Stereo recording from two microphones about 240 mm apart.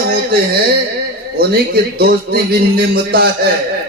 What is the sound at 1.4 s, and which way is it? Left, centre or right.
A man's voice, right.